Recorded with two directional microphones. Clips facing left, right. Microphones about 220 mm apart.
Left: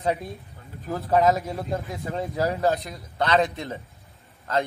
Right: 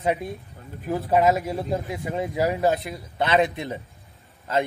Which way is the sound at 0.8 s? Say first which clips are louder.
Right 1 dB; 15° right (ahead or behind).